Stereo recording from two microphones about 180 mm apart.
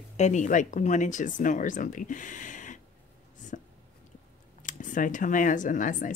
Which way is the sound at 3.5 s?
45° left (ahead or behind).